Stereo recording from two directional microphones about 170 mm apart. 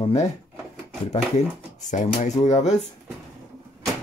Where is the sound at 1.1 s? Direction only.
45° left (ahead or behind).